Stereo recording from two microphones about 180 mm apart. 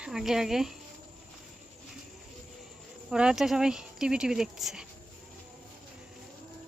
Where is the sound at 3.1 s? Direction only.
5° right (ahead or behind).